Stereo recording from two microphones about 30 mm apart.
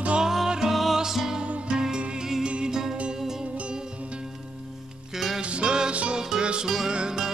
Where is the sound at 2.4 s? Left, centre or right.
Right.